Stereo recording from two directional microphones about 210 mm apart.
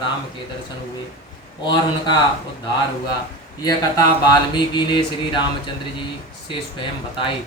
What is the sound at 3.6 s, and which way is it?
Mantra, 20° left (ahead or behind).